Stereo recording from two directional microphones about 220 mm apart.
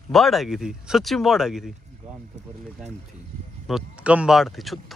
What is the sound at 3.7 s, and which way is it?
Speech, 5° right (ahead or behind).